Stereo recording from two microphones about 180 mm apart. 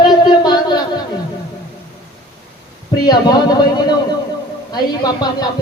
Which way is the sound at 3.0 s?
20° left (ahead or behind).